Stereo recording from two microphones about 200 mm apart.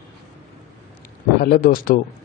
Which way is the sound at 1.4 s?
45° left (ahead or behind).